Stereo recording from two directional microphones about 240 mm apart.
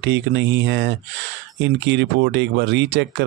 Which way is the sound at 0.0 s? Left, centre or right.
Right.